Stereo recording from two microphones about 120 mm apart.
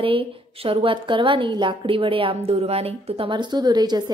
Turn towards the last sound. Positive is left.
turn(degrees=-35)  # may be behind; listen again after turning